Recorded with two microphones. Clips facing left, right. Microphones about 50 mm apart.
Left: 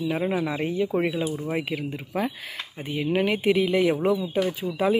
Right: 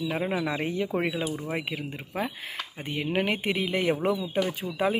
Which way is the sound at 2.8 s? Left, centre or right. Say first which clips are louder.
Left 3 dB; right.